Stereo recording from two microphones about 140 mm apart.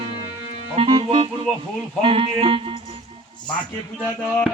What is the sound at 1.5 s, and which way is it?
Radio, 5° left (ahead or behind).